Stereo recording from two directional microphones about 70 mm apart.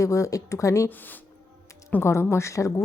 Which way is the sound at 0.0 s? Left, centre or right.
Left.